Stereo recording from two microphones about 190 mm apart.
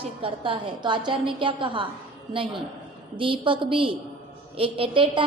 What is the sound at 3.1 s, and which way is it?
A woman's voice, 25° right (ahead or behind).